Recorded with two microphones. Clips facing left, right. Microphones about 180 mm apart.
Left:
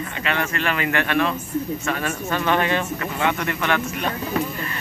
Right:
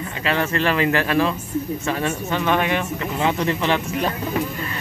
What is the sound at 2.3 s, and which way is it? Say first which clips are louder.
Speech: even; 15° right (ahead or behind).